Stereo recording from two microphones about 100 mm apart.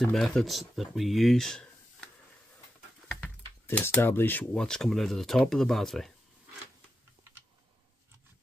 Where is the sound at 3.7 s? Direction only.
15° left (ahead or behind).